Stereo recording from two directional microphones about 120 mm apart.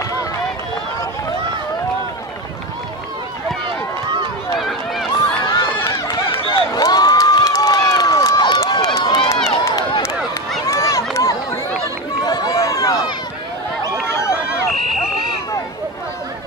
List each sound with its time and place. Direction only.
4.6 s run: centre (ahead or behind)
5.4 s run: 40° left (ahead or behind)
6.0 s a sound: 45° left (ahead or behind)
6.7 s crowd: 35° left (ahead or behind)
8.9 s run: 45° left (ahead or behind)
10.7 s run: 25° left (ahead or behind)